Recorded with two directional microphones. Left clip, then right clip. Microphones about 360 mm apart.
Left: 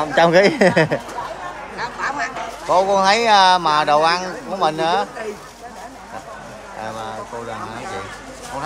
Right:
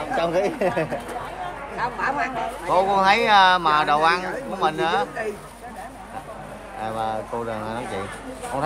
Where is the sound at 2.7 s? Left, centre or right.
Centre.